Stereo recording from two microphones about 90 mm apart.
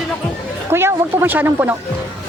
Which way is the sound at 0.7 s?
25° right (ahead or behind).